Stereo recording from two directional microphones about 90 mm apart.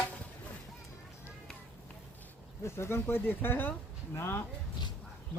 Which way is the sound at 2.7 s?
30° left (ahead or behind).